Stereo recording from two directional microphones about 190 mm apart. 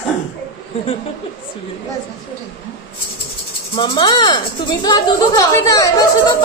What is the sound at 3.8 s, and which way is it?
Speech, 25° left (ahead or behind).